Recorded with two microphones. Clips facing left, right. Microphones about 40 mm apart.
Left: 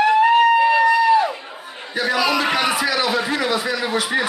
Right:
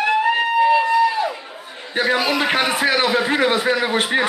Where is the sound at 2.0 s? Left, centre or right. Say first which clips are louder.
Right 1 dB; right.